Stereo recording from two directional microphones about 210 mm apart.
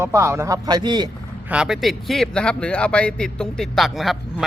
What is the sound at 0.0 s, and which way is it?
A man's voice, 10° right (ahead or behind).